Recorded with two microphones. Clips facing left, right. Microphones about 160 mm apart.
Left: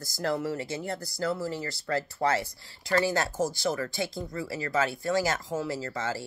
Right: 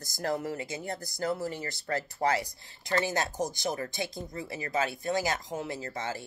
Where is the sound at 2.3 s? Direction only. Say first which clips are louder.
Left 1 dB; 15° right (ahead or behind).